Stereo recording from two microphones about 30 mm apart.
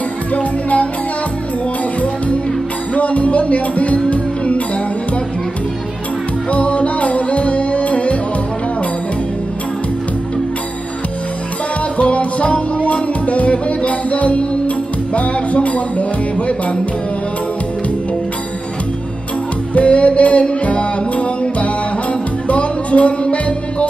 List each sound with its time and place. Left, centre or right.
0.4 s speech: left
2.9 s music: left
6.5 s music: left
12.0 s music: left
19.7 s music: left